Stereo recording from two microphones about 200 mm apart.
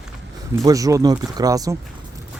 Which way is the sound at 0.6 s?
15° right (ahead or behind).